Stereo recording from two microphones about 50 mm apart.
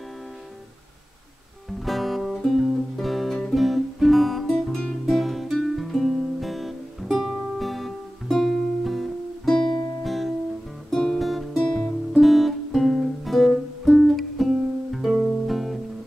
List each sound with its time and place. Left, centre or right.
1.8 s music: centre
3.5 s guitar: centre
10.0 s music: centre
11.5 s guitar: centre
12.2 s guitar: centre